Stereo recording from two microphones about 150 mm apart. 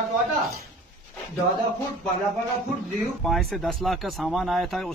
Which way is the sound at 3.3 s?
Centre (ahead or behind).